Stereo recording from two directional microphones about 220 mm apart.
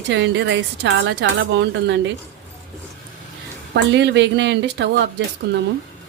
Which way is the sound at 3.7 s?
50° right (ahead or behind).